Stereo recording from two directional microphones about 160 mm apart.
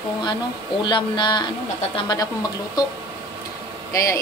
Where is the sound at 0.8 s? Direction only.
30° left (ahead or behind).